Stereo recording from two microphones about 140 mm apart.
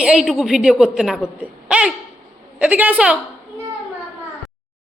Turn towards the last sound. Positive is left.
turn(degrees=-10)  # may be behind; listen again after turning